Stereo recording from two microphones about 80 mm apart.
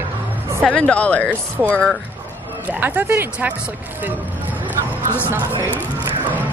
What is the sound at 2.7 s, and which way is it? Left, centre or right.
Speech, centre.